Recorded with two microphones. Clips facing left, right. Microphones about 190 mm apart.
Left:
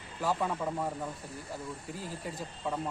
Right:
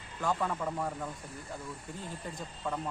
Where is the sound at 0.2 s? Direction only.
10° left (ahead or behind).